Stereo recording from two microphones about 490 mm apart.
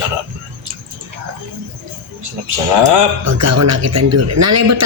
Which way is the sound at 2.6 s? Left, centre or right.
Right.